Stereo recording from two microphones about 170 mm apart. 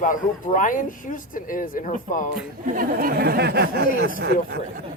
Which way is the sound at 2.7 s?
55° right (ahead or behind).